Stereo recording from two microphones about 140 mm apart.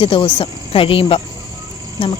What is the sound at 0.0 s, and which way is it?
Speech, 35° left (ahead or behind).